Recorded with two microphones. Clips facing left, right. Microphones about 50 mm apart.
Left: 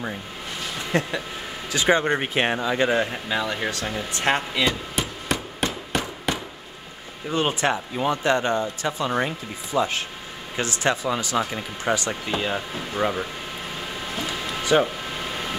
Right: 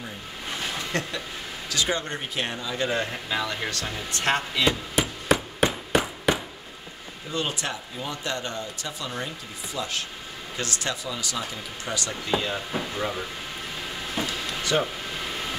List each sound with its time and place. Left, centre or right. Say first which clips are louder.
0.9 s speech: left 5 dB; centre
2.1 s speech: left 7 dB; left
2.9 s speech: left 4 dB; centre
4.6 s hammer: right 1 dB; centre
7.2 s speech: left 7 dB; left
14.2 s a sound: left 3 dB; left